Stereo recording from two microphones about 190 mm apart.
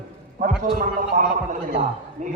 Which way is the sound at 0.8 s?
45° right (ahead or behind).